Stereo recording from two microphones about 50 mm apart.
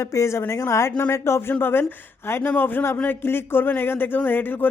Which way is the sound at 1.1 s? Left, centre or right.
Left.